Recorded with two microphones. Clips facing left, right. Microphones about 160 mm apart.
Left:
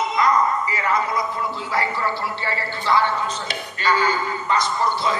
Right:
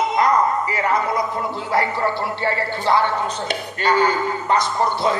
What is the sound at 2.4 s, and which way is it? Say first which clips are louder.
A man's voice: right 5 dB; 55° right (ahead or behind).